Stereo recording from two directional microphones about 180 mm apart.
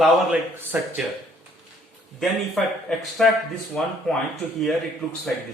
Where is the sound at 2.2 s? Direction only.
Centre (ahead or behind).